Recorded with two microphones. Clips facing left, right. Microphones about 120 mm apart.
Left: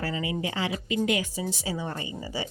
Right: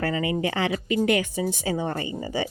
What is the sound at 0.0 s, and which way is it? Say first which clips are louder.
A woman's voice: right 5 dB; 60° right (ahead or behind).